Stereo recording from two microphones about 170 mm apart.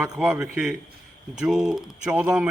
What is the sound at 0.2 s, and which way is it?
A man's voice, 5° right (ahead or behind).